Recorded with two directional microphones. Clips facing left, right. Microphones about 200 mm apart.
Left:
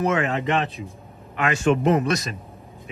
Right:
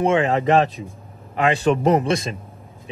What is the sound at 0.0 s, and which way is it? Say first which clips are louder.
A man's voice: right 4 dB; 30° right (ahead or behind).